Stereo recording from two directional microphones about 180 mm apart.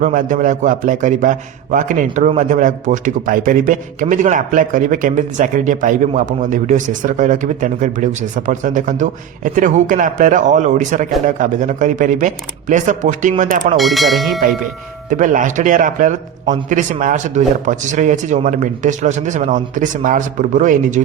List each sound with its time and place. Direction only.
0.0 s a man's voice: 45° right (ahead or behind)
13.7 s speech: centre (ahead or behind)
15.1 s a man's voice: 45° right (ahead or behind)